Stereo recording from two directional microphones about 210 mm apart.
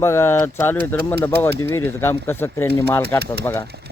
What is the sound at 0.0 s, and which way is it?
Speech, 10° left (ahead or behind).